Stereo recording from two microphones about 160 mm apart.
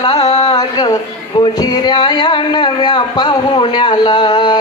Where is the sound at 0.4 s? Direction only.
25° left (ahead or behind).